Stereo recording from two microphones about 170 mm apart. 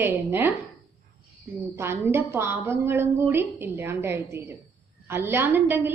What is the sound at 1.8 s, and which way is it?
A woman's voice, 15° right (ahead or behind).